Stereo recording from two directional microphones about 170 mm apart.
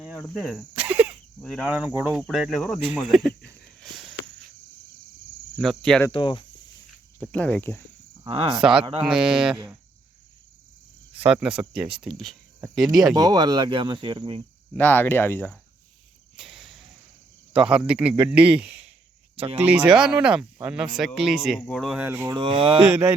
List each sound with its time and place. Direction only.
0.0 s cricket: centre (ahead or behind)
1.4 s speech: centre (ahead or behind)
5.5 s speech: centre (ahead or behind)
6.1 s speech: 30° left (ahead or behind)
7.2 s speech: 5° left (ahead or behind)
8.3 s speech: 30° right (ahead or behind)
9.0 s speech: 5° right (ahead or behind)
11.3 s speech: 10° right (ahead or behind)
13.1 s speech: 25° right (ahead or behind)
14.8 s speech: 10° left (ahead or behind)
16.4 s cricket: centre (ahead or behind)
17.5 s speech: 5° right (ahead or behind)
21.9 s speech: 10° right (ahead or behind)
22.4 s speech: 30° right (ahead or behind)